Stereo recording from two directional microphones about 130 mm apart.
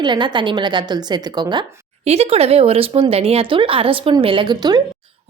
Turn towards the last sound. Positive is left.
turn(degrees=-35)  # may be behind; listen again after turning